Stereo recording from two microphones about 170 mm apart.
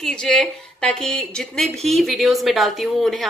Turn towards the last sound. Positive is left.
turn(degrees=0)  # may be behind; listen again after turning